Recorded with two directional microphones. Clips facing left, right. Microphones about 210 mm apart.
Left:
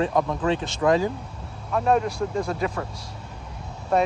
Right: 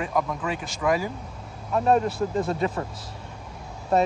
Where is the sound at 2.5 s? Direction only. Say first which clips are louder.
Right 1 dB; 25° right (ahead or behind).